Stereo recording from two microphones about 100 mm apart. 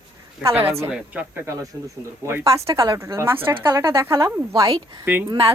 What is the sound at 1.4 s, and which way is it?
Speech, 35° right (ahead or behind).